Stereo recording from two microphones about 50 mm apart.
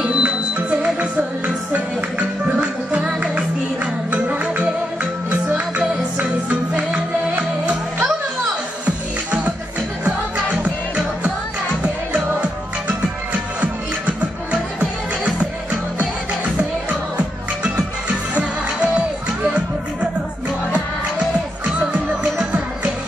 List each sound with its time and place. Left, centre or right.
0.0 s music: right
8.8 s music: right
11.8 s music: right
16.0 s music: right
21.7 s music: right